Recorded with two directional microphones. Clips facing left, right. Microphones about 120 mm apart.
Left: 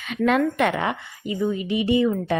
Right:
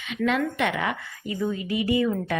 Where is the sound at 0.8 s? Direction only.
25° left (ahead or behind).